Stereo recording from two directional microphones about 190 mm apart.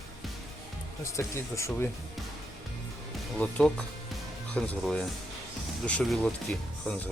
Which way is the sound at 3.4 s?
5° left (ahead or behind).